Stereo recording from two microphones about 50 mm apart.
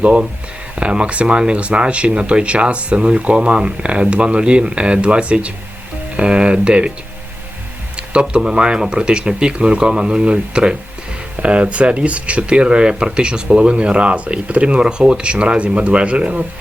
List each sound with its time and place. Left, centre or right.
0.8 s speech: right
7.9 s speech: right